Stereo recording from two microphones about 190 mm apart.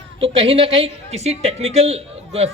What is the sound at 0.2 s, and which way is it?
A woman's voice, 30° right (ahead or behind).